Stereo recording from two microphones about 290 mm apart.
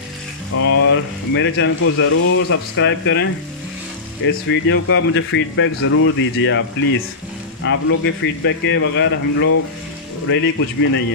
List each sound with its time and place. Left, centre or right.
0.8 s speech: left